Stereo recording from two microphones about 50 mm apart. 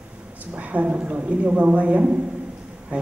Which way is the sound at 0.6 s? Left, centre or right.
Right.